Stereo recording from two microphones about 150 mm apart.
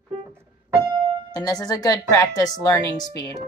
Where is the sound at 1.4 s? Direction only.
25° left (ahead or behind).